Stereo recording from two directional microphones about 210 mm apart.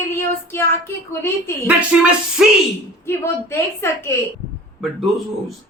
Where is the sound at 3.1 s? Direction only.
10° left (ahead or behind).